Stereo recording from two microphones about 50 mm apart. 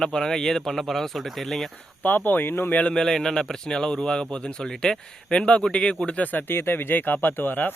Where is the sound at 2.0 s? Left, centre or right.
Left.